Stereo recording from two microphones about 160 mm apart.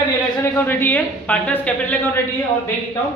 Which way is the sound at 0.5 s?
15° left (ahead or behind).